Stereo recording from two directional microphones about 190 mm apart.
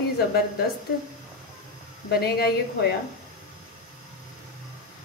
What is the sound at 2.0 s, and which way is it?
Speech, 55° left (ahead or behind).